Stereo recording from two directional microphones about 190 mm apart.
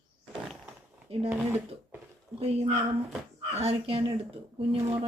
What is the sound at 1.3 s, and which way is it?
Speech, 10° right (ahead or behind).